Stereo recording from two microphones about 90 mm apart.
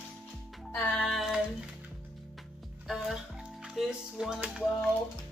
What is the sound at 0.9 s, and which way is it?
Speech, 5° left (ahead or behind).